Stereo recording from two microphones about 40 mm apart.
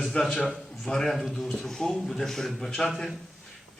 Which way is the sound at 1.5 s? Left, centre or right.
Centre.